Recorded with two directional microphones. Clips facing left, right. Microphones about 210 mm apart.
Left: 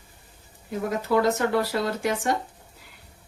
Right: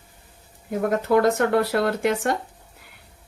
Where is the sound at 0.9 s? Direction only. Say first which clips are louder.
Right 3 dB; 60° right (ahead or behind).